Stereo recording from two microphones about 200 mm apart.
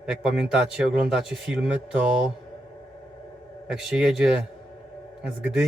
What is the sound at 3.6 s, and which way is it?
A man's voice, 5° right (ahead or behind).